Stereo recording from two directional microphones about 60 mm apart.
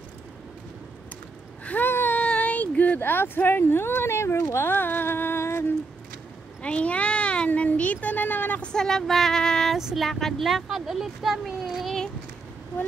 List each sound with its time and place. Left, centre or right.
1.6 s a sound: left
1.9 s child singing: left
2.1 s speech: left
6.6 s speech: left
8.7 s female singing: centre
9.8 s speech: centre